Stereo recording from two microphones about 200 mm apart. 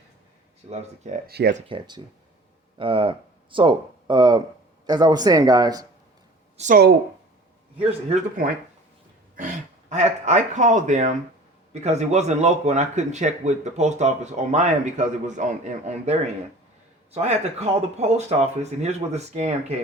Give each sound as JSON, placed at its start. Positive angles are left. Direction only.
{"t": 0.7, "sound": "speech", "side_deg": -35}
{"t": 1.3, "sound": "speech", "side_deg": -55}
{"t": 1.5, "sound": "speech", "side_deg": -25}
{"t": 6.6, "sound": "speech", "side_deg": -40}
{"t": 9.3, "sound": "speech", "side_deg": -40}